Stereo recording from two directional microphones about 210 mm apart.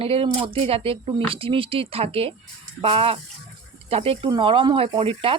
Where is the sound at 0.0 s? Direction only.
25° right (ahead or behind).